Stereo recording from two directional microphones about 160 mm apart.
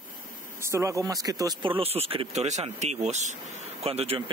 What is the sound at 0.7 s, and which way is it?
Speech, 20° right (ahead or behind).